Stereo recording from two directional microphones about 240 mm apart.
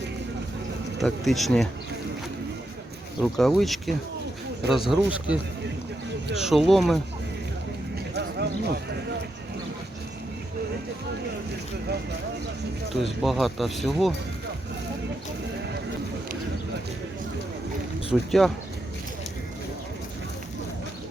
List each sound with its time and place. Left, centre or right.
0.9 s speech: centre
3.2 s speech: centre
6.4 s speech: centre
8.1 s a sound: right
13.0 s speech: centre
18.1 s speech: centre